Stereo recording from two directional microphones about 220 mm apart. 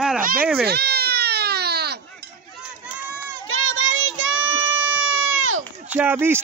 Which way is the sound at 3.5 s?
60° right (ahead or behind).